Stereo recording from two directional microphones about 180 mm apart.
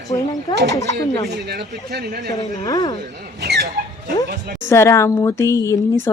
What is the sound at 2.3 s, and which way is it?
Speech, 20° left (ahead or behind).